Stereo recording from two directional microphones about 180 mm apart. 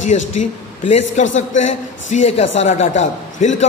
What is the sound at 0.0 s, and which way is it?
A man's voice, 40° left (ahead or behind).